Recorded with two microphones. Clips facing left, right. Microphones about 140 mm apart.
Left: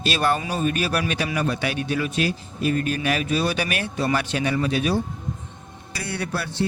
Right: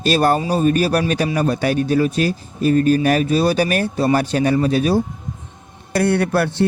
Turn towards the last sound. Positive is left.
turn(degrees=-55)  # may be behind; listen again after turning